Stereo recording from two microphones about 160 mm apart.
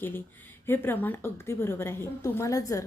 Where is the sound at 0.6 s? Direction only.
15° left (ahead or behind).